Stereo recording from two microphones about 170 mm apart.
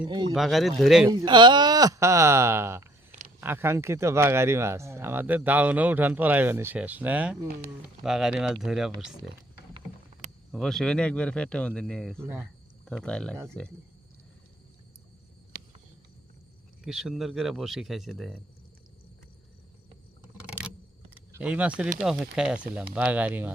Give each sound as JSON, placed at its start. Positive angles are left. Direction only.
{"t": 0.1, "sound": "speech", "side_deg": -25}
{"t": 0.3, "sound": "speech", "side_deg": 0}
{"t": 1.0, "sound": "speech", "side_deg": -25}
{"t": 10.5, "sound": "speech", "side_deg": 0}
{"t": 12.2, "sound": "speech", "side_deg": -15}
{"t": 12.8, "sound": "speech", "side_deg": 5}
{"t": 13.3, "sound": "speech", "side_deg": -15}
{"t": 16.8, "sound": "speech", "side_deg": -5}
{"t": 21.2, "sound": "speech", "side_deg": -10}